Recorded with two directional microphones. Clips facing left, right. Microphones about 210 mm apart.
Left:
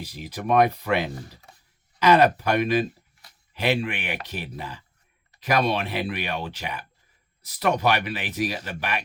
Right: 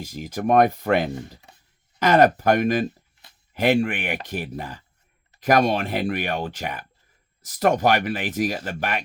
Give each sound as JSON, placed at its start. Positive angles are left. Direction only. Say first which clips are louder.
{"t": 0.0, "sound": "speech", "louder": "right 6 dB", "side_deg": -45}